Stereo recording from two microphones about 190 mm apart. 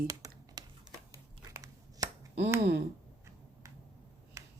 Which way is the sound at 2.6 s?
60° right (ahead or behind).